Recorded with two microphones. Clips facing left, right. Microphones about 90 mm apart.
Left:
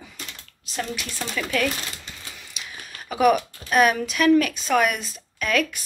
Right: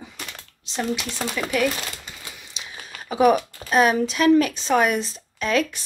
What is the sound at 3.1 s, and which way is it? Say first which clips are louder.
Speech: right 1 dB; 30° right (ahead or behind).